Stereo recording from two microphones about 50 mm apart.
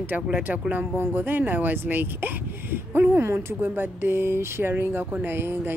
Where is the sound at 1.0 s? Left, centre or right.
Right.